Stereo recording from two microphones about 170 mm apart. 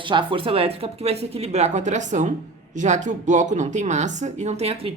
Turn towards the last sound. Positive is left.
turn(degrees=-35)  # may be behind; listen again after turning